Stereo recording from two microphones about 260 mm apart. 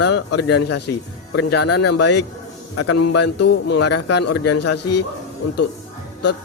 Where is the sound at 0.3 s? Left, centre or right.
Left.